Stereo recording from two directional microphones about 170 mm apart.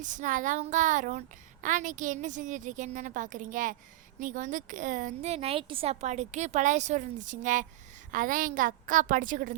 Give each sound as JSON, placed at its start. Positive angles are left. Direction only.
{"t": 0.0, "sound": "a woman's voice", "side_deg": -50}